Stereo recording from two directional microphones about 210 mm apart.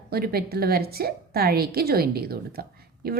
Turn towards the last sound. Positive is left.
turn(degrees=-45)  # may be behind; listen again after turning